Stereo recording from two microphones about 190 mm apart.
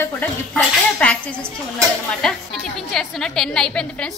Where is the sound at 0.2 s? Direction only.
10° left (ahead or behind).